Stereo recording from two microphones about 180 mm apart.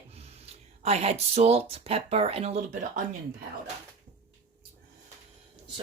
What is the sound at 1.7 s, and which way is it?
Speech, 35° right (ahead or behind).